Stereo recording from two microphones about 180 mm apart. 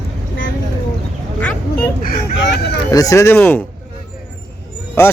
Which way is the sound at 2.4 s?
75° left (ahead or behind).